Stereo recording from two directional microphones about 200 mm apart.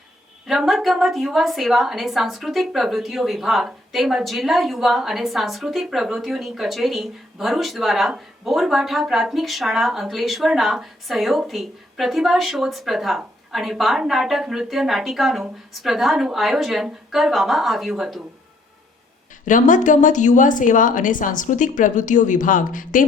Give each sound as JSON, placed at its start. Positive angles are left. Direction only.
{"t": 0.4, "sound": "a woman's voice", "side_deg": 0}
{"t": 19.5, "sound": "a woman's voice", "side_deg": 40}